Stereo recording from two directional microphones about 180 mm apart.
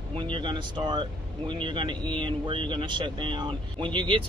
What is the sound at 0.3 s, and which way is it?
Speech, 25° right (ahead or behind).